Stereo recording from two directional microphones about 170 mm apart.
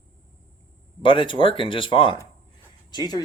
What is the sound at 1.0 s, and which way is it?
Speech, 30° left (ahead or behind).